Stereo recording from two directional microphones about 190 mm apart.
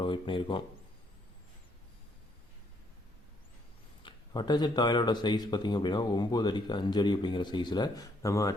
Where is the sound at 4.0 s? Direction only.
25° left (ahead or behind).